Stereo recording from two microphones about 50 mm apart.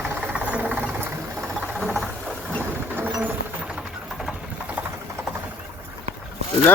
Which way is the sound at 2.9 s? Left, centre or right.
Right.